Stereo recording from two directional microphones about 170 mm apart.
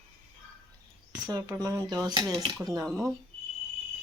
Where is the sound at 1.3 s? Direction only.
20° right (ahead or behind).